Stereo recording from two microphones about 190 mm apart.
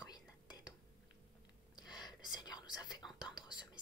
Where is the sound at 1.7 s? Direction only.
20° left (ahead or behind).